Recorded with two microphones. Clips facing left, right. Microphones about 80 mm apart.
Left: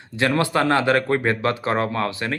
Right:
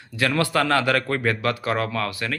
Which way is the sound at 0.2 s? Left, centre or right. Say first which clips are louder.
Left 2 dB; left.